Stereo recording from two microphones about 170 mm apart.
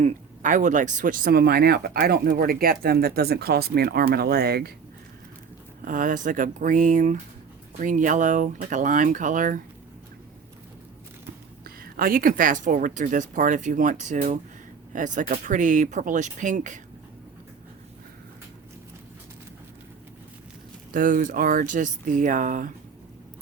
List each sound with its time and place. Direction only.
0.0 s speech: 50° right (ahead or behind); by 4.7 s 65° right (ahead or behind)
5.8 s speech: 50° right (ahead or behind)
11.8 s speech: 60° right (ahead or behind)
20.9 s speech: 50° right (ahead or behind)